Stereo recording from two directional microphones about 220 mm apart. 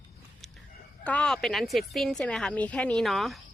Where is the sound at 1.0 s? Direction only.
5° left (ahead or behind).